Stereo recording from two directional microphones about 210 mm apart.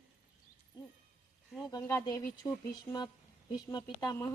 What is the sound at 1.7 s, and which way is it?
Speech, 15° left (ahead or behind).